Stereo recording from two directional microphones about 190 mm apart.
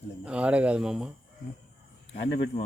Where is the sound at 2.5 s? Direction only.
35° left (ahead or behind).